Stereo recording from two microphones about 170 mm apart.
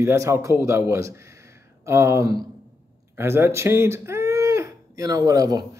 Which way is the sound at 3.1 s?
15° right (ahead or behind).